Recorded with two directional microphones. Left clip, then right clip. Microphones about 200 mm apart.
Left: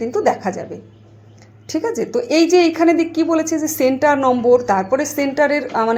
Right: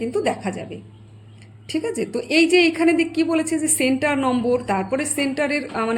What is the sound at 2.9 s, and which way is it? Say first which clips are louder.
Speech: left 3 dB; 20° left (ahead or behind).